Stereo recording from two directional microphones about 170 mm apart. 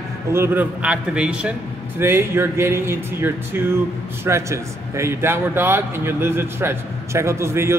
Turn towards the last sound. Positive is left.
turn(degrees=-15)  # may be behind; listen again after turning